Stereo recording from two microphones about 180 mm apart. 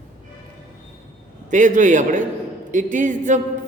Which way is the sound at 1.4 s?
45° right (ahead or behind).